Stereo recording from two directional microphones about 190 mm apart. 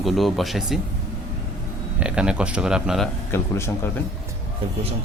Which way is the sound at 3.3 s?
15° left (ahead or behind).